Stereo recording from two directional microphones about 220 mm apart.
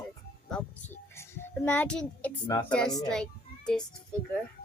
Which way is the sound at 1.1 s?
10° left (ahead or behind).